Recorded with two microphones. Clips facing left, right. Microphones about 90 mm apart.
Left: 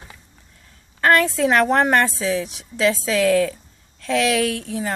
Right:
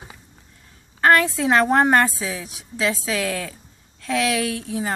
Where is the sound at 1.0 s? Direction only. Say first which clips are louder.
Even; 15° right (ahead or behind).